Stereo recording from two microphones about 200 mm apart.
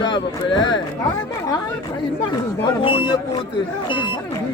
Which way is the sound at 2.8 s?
25° left (ahead or behind).